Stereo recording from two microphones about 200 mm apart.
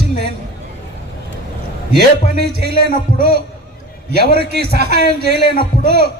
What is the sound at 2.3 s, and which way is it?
Speech, 55° right (ahead or behind).